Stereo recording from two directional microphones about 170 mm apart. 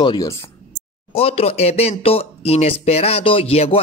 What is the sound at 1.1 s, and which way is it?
Speech, 35° left (ahead or behind).